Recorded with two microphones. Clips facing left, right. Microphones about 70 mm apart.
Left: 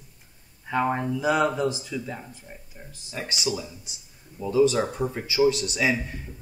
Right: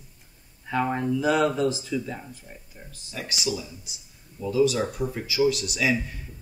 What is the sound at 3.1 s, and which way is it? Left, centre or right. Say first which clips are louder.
Speech: left 1 dB; left.